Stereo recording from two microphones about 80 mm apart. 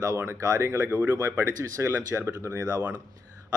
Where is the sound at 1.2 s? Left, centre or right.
Right.